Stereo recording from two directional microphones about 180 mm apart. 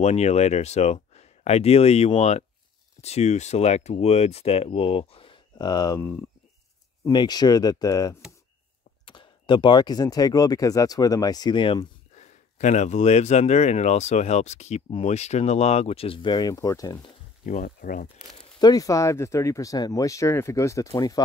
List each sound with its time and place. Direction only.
0.0 s speech: 35° left (ahead or behind); by 6.0 s 20° left (ahead or behind)
7.1 s speech: 20° left (ahead or behind)
12.2 s speech: 40° left (ahead or behind); by 17.1 s 20° left (ahead or behind)
17.5 s speech: 55° left (ahead or behind)
18.6 s speech: 20° left (ahead or behind)